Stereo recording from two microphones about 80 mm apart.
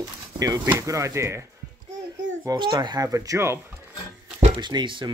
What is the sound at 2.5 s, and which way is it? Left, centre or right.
Speech, right.